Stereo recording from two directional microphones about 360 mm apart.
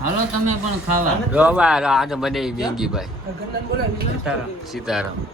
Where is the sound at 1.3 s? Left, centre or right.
Centre.